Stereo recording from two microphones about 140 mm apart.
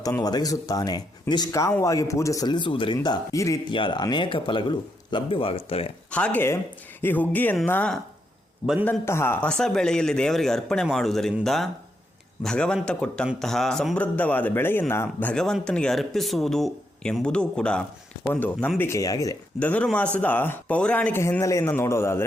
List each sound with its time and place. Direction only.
0.2 s speech: 25° left (ahead or behind)
3.7 s speech: 35° left (ahead or behind)
6.1 s a man's voice: 10° left (ahead or behind)
9.5 s a man's voice: 5° left (ahead or behind)
18.8 s speech: 20° left (ahead or behind)
19.5 s a man's voice: 10° left (ahead or behind)